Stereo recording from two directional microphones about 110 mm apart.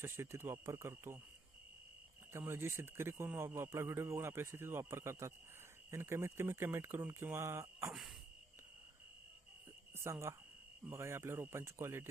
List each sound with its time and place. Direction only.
0.0 s speech: 25° right (ahead or behind)
2.3 s speech: 25° right (ahead or behind)
9.9 s speech: 25° right (ahead or behind)